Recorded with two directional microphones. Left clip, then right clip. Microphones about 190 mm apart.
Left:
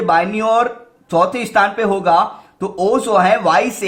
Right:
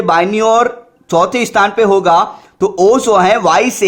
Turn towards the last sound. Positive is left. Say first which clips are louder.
# right 3 dB
turn(degrees=-35)  # may be behind; listen again after turning